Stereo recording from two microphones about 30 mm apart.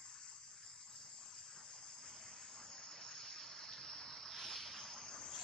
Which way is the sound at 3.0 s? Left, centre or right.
Centre.